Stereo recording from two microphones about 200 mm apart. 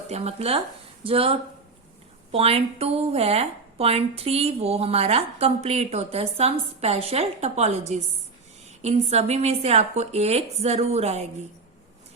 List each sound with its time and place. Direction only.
0.1 s a woman's voice: 30° right (ahead or behind)